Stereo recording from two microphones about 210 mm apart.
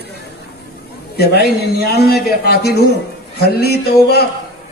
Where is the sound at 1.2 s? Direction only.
50° left (ahead or behind).